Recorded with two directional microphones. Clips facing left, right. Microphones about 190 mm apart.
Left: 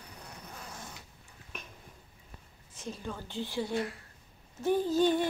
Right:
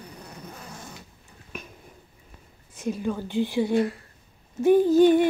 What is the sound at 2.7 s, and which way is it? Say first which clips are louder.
A woman's voice: right 12 dB; 10° right (ahead or behind).